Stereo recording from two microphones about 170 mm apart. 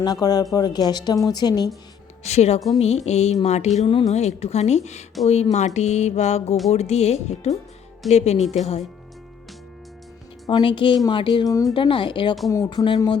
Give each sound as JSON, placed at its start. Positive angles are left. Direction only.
{"t": 0.0, "sound": "speech", "side_deg": 25}
{"t": 2.2, "sound": "music", "side_deg": 40}
{"t": 3.8, "sound": "music", "side_deg": 30}
{"t": 10.4, "sound": "speech", "side_deg": 30}